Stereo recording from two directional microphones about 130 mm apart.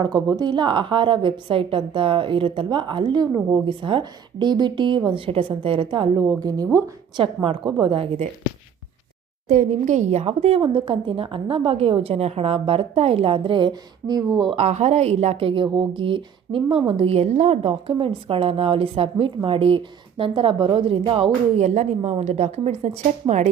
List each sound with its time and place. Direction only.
0.0 s a woman's voice: 30° right (ahead or behind)
6.1 s a woman's voice: 25° right (ahead or behind)
7.2 s a woman's voice: 40° right (ahead or behind)
9.5 s a woman's voice: 80° right; by 14.3 s 35° right (ahead or behind)
14.5 s a woman's voice: 60° right (ahead or behind); by 21.3 s 45° right (ahead or behind)
21.6 s a woman's voice: 65° right (ahead or behind)